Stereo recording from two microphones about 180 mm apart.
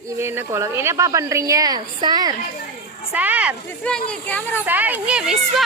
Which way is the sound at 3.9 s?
5° left (ahead or behind).